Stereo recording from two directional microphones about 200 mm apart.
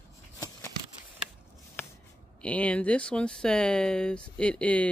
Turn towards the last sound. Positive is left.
turn(degrees=5)  # may be behind; listen again after turning